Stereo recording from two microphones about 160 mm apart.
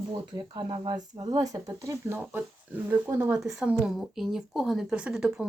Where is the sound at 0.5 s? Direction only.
30° right (ahead or behind).